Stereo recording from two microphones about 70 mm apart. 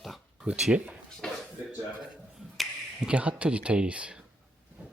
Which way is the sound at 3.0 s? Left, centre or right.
Centre.